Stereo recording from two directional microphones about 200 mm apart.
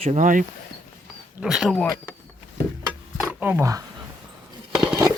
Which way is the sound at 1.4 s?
Centre (ahead or behind).